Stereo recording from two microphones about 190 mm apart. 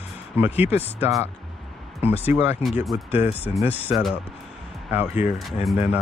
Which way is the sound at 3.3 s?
10° right (ahead or behind).